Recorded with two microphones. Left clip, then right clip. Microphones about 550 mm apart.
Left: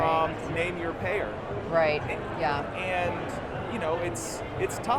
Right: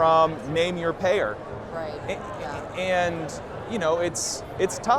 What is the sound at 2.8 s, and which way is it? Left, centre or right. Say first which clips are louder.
Speech: right 6 dB; right.